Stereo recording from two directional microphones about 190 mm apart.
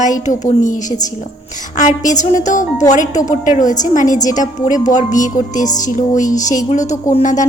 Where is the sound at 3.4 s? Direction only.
40° left (ahead or behind).